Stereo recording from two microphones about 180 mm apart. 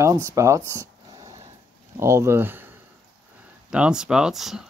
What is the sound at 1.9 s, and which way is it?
Speech, 15° right (ahead or behind).